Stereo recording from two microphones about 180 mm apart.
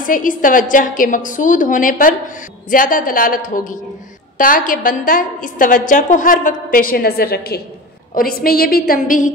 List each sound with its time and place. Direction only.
0.0 s a woman's voice: 50° left (ahead or behind)